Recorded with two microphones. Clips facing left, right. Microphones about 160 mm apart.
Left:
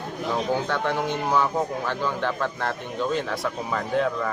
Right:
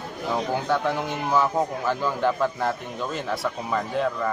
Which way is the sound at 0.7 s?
Centre (ahead or behind).